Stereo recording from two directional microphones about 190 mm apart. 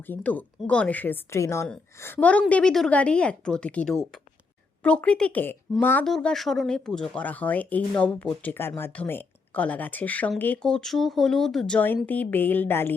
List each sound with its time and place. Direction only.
0.0 s speech: 10° left (ahead or behind)